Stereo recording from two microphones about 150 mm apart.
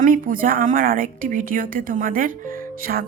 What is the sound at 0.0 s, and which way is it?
A woman's voice, 65° right (ahead or behind).